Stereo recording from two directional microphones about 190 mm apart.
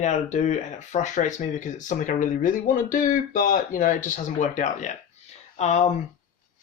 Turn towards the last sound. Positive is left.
turn(degrees=35)  # may be behind; listen again after turning